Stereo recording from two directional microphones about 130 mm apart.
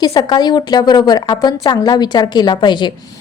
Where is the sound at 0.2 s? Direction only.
30° left (ahead or behind).